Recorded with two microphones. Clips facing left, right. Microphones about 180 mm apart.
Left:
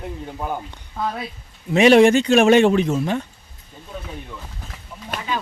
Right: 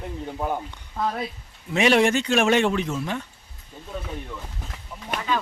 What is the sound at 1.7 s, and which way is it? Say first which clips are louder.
A man's voice: left 7 dB; 20° left (ahead or behind).